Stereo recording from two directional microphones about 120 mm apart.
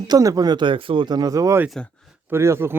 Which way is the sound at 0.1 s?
30° right (ahead or behind).